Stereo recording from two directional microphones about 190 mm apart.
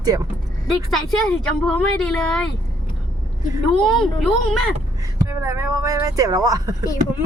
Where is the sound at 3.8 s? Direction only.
Centre (ahead or behind).